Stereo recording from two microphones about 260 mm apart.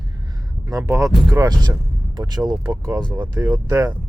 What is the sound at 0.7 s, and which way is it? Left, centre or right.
Speech, centre.